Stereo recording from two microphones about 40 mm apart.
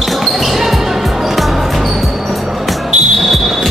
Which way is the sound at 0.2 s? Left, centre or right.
Centre.